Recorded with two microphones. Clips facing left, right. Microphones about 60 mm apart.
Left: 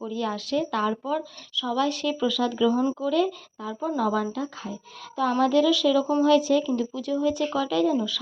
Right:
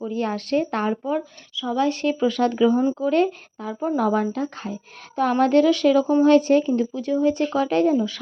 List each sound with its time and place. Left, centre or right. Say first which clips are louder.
0.1 s a woman's voice: right 4 dB; right
1.0 s speech: right 3 dB; right
2.7 s speech: right 4 dB; right
3.1 s a woman's voice: right 4 dB; right